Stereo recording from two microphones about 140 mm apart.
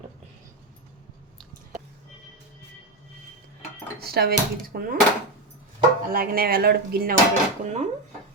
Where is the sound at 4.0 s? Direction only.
90° right.